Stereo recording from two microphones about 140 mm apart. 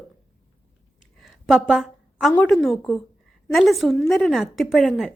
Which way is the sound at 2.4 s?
Centre (ahead or behind).